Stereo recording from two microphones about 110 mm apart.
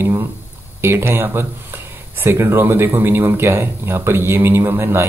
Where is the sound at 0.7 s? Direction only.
20° right (ahead or behind).